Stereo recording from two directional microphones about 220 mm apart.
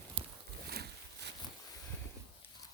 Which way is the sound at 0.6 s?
45° right (ahead or behind).